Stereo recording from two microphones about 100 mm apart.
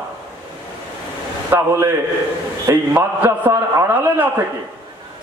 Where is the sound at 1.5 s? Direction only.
20° right (ahead or behind).